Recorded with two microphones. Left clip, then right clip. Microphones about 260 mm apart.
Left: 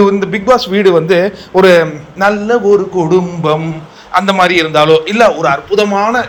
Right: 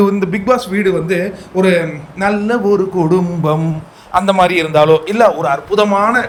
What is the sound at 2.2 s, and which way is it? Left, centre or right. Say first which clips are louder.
A man's voice: left 4 dB; centre.